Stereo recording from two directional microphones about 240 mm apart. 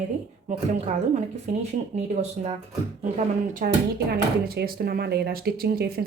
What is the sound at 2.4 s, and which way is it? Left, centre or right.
Speech, right.